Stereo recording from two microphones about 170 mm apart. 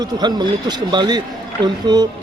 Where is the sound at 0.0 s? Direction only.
25° right (ahead or behind).